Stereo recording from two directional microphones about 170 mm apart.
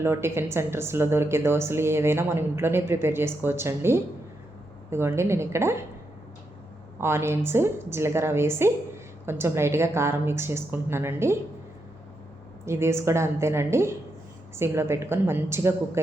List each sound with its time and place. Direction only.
0.0 s a woman's voice: 15° right (ahead or behind)
7.0 s a woman's voice: 15° right (ahead or behind)
12.6 s a woman's voice: 15° right (ahead or behind)